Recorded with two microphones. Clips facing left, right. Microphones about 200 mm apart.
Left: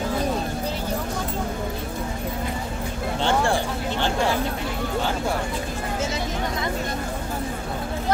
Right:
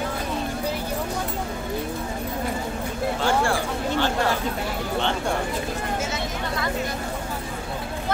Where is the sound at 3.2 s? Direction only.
25° left (ahead or behind).